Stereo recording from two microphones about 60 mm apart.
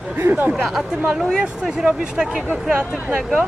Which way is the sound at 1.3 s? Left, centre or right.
Centre.